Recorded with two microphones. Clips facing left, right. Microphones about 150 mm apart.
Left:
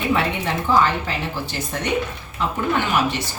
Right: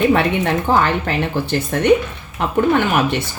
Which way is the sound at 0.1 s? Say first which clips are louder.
Right 6 dB; 60° right (ahead or behind).